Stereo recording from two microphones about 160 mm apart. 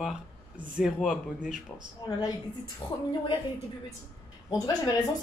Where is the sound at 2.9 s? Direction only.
30° left (ahead or behind).